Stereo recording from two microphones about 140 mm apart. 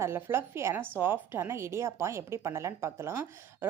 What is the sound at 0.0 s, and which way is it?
A woman's voice, 15° right (ahead or behind).